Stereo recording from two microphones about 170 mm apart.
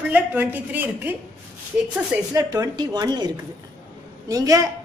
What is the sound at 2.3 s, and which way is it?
A woman's voice, 20° right (ahead or behind).